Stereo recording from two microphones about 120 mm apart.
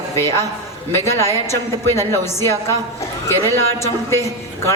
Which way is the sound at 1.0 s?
25° left (ahead or behind).